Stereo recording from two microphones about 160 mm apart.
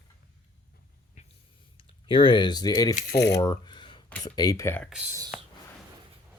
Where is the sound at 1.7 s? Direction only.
30° left (ahead or behind).